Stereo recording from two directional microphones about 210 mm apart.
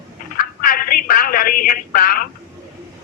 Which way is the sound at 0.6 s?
45° left (ahead or behind).